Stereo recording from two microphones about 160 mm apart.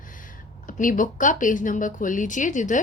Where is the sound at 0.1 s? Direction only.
55° left (ahead or behind).